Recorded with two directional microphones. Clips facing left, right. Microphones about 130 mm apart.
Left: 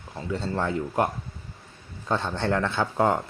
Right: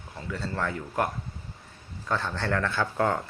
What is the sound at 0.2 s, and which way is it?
Speech, 25° left (ahead or behind).